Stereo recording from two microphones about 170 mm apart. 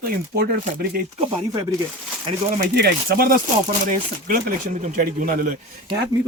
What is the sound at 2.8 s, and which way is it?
Speech, 60° right (ahead or behind).